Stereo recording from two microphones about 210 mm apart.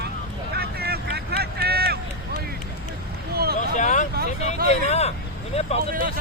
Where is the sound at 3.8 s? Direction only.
35° left (ahead or behind).